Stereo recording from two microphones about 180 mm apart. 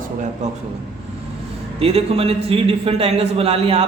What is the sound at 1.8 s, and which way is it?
A man's voice, 35° right (ahead or behind).